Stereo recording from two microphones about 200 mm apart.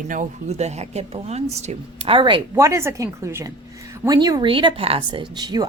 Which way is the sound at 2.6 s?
15° right (ahead or behind).